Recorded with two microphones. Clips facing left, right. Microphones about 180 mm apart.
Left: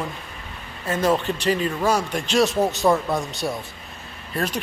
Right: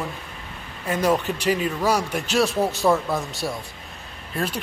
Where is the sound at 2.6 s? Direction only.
15° left (ahead or behind).